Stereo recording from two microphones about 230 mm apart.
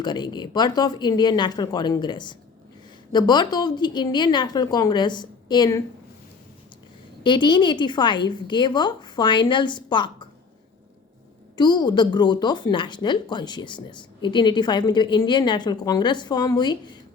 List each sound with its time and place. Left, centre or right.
0.0 s a woman's voice: centre
7.3 s a woman's voice: centre
11.5 s a woman's voice: centre